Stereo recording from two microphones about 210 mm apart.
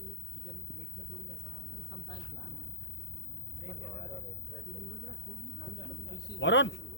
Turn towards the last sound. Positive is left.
turn(degrees=60)  # may be behind; listen again after turning